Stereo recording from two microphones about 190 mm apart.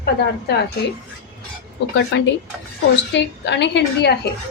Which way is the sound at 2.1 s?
70° left (ahead or behind).